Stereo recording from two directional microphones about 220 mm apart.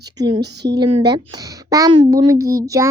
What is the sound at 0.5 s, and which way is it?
Speech, 50° right (ahead or behind).